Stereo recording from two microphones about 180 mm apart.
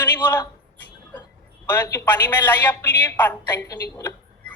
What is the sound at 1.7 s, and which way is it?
A woman's voice, 10° left (ahead or behind).